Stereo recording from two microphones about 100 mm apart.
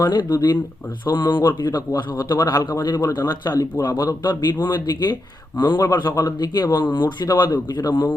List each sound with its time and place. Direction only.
0.0 s speech: 45° left (ahead or behind)
2.3 s a man's voice: 30° left (ahead or behind)